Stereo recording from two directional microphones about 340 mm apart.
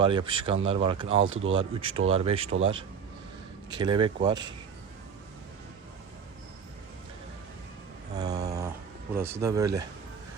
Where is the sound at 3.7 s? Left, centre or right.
Centre.